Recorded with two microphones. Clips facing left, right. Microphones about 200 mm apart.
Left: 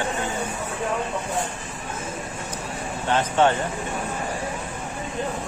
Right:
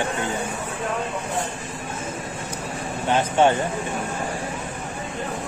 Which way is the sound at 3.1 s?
10° right (ahead or behind).